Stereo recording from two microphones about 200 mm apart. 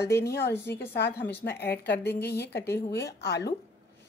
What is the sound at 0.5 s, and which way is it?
Speech, 10° left (ahead or behind).